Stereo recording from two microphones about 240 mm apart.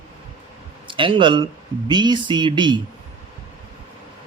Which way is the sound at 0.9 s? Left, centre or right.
Right.